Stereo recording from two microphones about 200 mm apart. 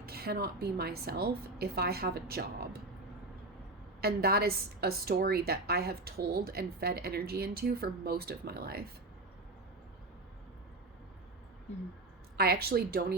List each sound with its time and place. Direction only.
0.0 s a woman's voice: 50° right (ahead or behind)
4.0 s a woman's voice: 50° right (ahead or behind)
12.4 s a woman's voice: 50° right (ahead or behind)